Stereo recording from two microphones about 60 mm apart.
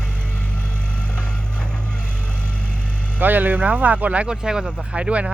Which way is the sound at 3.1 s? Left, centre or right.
Right.